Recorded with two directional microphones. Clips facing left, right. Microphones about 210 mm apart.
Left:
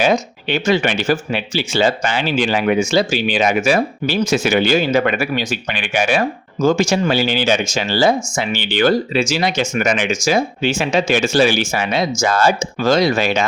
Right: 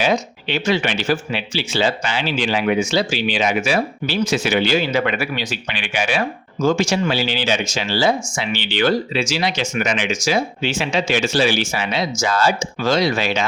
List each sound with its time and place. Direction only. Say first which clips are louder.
0.0 s speech: left 3 dB; 50° left (ahead or behind)